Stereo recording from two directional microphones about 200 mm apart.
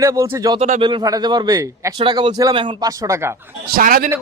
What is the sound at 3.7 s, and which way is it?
Speech, 45° right (ahead or behind).